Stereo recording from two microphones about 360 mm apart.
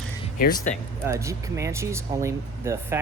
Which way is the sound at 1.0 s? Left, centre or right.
Centre.